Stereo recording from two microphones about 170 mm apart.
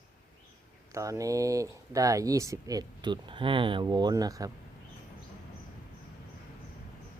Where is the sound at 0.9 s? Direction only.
20° right (ahead or behind).